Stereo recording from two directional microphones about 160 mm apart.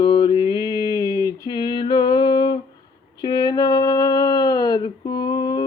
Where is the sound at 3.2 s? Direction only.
25° left (ahead or behind).